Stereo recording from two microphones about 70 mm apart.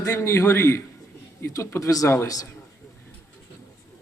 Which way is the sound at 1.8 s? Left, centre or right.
Left.